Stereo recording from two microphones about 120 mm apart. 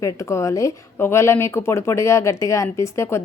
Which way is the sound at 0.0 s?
25° left (ahead or behind).